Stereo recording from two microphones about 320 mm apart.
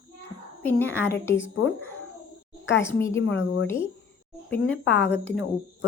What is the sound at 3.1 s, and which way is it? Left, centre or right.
Speech, left.